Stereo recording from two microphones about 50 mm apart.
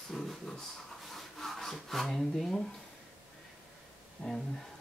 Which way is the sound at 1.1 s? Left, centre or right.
Centre.